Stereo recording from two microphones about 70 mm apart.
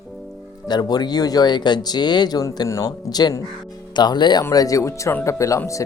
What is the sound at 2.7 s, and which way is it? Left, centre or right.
Speech, left.